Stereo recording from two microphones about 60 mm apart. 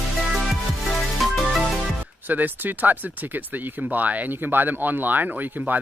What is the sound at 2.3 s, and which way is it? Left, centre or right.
Speech, right.